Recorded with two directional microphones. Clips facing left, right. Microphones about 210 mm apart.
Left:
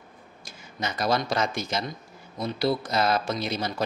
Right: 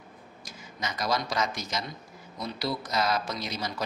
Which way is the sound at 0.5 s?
30° left (ahead or behind).